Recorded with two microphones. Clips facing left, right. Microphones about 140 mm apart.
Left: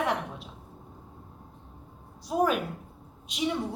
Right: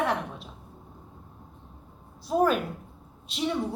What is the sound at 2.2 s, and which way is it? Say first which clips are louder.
A woman's voice: right 2 dB; 10° left (ahead or behind).